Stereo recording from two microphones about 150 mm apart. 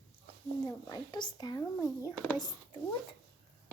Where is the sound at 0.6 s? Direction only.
25° left (ahead or behind).